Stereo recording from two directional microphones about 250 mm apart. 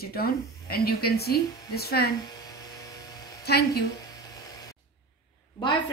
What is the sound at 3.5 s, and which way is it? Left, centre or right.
Speech, left.